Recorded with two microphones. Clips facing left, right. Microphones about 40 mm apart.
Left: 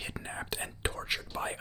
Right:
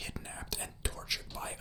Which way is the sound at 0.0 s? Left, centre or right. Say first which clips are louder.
Left 5 dB; left.